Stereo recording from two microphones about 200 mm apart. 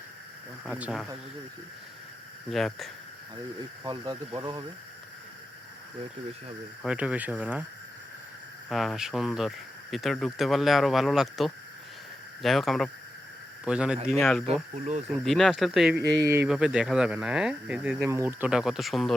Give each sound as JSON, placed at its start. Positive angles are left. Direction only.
{"t": 0.6, "sound": "speech", "side_deg": -5}
{"t": 2.5, "sound": "speech", "side_deg": 0}
{"t": 3.8, "sound": "speech", "side_deg": -20}
{"t": 6.8, "sound": "speech", "side_deg": -5}
{"t": 8.7, "sound": "speech", "side_deg": 0}
{"t": 14.8, "sound": "speech", "side_deg": -35}
{"t": 15.2, "sound": "speech", "side_deg": 0}